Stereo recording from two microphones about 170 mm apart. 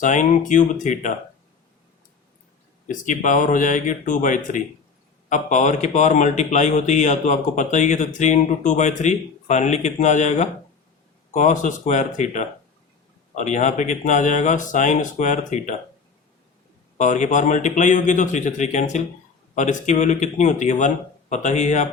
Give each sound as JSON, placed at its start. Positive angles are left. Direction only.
{"t": 0.0, "sound": "speech", "side_deg": 45}
{"t": 2.8, "sound": "speech", "side_deg": 50}
{"t": 17.0, "sound": "speech", "side_deg": 45}